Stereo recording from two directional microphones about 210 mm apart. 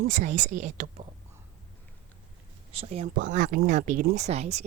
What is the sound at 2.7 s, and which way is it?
Speech, 30° right (ahead or behind).